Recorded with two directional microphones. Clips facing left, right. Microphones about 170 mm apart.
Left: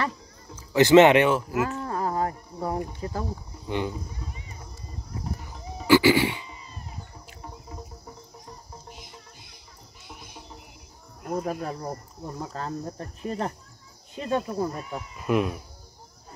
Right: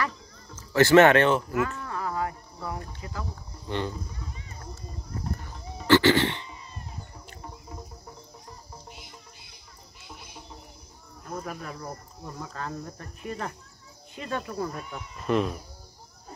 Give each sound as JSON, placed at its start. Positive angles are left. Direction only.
{"t": 0.6, "sound": "speech", "side_deg": 20}
{"t": 1.8, "sound": "a sound", "side_deg": 35}
{"t": 3.0, "sound": "speech", "side_deg": 35}
{"t": 3.6, "sound": "speech", "side_deg": 15}
{"t": 5.4, "sound": "goat", "side_deg": 5}
{"t": 7.2, "sound": "music", "side_deg": 5}
{"t": 11.4, "sound": "speech", "side_deg": 35}
{"t": 15.0, "sound": "speech", "side_deg": 10}